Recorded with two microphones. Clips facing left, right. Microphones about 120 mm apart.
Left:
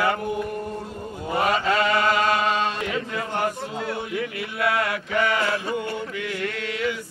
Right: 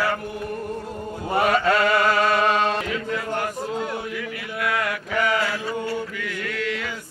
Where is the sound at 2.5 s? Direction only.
55° right (ahead or behind).